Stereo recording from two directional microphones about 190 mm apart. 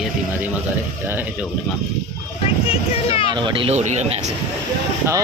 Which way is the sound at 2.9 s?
30° left (ahead or behind).